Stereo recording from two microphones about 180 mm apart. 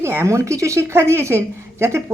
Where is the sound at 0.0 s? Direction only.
15° right (ahead or behind).